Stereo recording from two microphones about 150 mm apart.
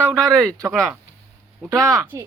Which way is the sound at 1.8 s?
20° right (ahead or behind).